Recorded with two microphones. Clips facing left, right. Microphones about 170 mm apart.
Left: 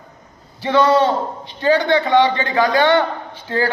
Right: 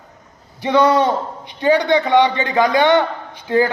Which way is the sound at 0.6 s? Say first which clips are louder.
Even; 20° right (ahead or behind).